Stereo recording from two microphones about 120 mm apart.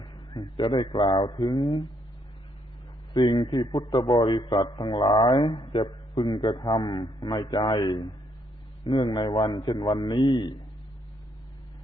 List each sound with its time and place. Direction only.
0.0 s a man's voice: 40° left (ahead or behind)
3.1 s a man's voice: 40° left (ahead or behind)